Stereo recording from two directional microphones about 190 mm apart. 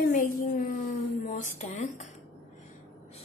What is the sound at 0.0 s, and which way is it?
A child's voice, 45° left (ahead or behind).